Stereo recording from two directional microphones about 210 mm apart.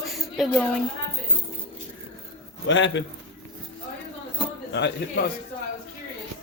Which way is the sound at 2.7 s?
60° left (ahead or behind).